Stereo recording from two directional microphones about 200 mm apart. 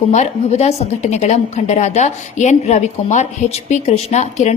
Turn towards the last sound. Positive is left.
turn(degrees=35)  # may be behind; listen again after turning